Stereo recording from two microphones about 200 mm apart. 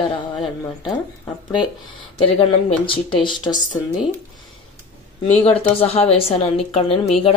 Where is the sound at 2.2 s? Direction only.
25° left (ahead or behind).